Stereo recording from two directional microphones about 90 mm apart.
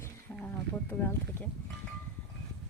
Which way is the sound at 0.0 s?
20° left (ahead or behind).